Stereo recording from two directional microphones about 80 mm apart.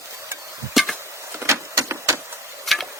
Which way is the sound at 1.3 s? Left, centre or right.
Right.